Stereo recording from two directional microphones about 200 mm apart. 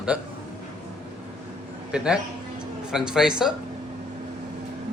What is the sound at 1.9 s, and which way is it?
Speech, 5° right (ahead or behind).